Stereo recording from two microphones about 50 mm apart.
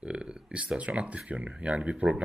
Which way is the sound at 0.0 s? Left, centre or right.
Right.